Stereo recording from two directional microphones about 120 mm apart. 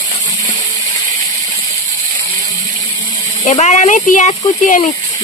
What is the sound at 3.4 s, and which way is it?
Speech, 80° left.